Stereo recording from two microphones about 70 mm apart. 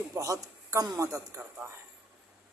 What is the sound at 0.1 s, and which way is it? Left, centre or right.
A man's voice, right.